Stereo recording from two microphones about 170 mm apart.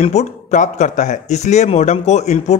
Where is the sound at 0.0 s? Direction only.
40° left (ahead or behind).